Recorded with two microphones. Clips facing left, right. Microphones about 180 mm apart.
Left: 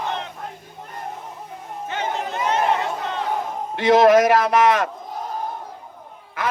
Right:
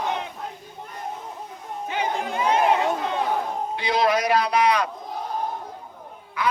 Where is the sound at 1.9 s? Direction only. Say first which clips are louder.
Even; 10° right (ahead or behind).